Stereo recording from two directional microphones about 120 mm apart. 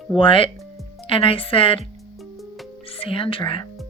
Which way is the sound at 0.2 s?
45° left (ahead or behind).